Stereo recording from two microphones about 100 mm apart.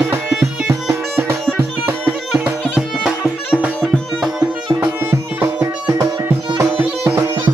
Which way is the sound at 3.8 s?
Centre (ahead or behind).